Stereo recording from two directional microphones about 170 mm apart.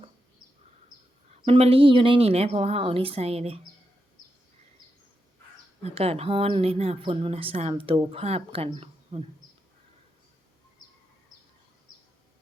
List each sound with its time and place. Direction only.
1.5 s speech: 35° right (ahead or behind)
5.8 s speech: 35° right (ahead or behind)